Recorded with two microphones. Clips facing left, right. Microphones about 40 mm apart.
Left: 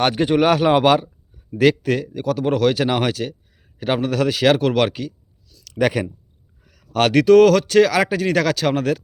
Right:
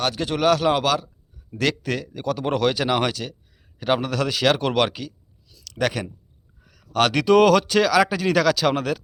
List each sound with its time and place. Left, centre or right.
0.0 s a man's voice: left
0.3 s a man's voice: left
1.5 s speech: centre
6.7 s a sound: centre
7.2 s speech: centre